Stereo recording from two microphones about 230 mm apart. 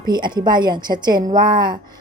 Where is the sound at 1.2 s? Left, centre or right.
Right.